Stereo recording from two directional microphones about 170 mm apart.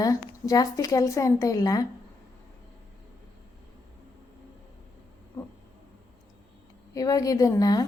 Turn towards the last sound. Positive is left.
turn(degrees=20)  # may be behind; listen again after turning